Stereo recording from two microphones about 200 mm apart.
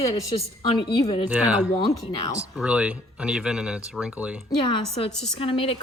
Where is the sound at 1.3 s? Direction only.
5° right (ahead or behind).